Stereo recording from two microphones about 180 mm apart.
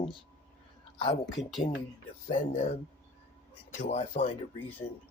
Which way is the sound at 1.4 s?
40° left (ahead or behind).